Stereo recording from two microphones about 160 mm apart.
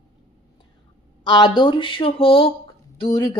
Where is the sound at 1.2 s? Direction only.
25° left (ahead or behind).